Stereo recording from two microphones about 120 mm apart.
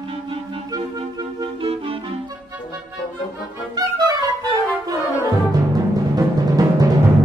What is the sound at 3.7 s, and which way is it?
Music, 30° right (ahead or behind).